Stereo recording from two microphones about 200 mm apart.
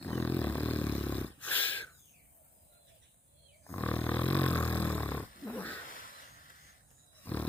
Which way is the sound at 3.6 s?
10° left (ahead or behind).